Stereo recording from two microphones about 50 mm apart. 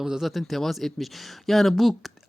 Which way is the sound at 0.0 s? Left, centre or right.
Centre.